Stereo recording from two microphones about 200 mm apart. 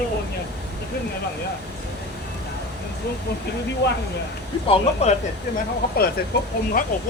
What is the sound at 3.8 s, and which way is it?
Speech, 55° left (ahead or behind).